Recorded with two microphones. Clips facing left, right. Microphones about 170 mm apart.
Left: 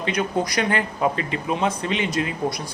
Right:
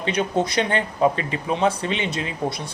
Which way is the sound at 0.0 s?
30° right (ahead or behind).